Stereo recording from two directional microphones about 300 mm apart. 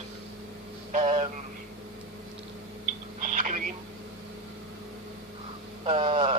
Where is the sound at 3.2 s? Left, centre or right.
Right.